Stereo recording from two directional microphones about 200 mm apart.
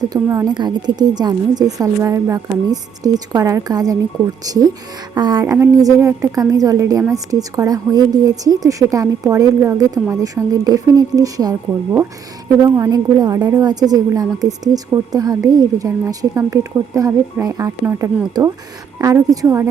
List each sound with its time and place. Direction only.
0.0 s a woman's voice: 15° right (ahead or behind)